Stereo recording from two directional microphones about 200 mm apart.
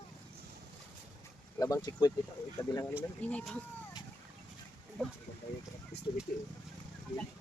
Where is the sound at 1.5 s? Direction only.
15° left (ahead or behind).